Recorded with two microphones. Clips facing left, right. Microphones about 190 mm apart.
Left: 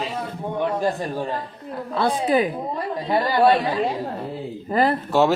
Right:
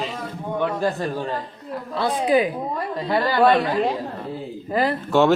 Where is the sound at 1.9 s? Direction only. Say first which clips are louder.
Even; 45° left (ahead or behind).